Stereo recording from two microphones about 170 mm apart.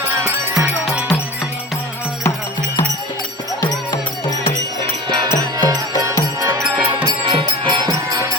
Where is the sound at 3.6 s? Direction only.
20° left (ahead or behind).